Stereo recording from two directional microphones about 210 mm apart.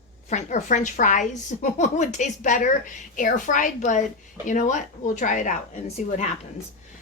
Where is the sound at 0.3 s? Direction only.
35° left (ahead or behind).